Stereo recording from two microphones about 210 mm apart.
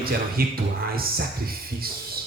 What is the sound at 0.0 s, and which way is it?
Speech, 45° right (ahead or behind).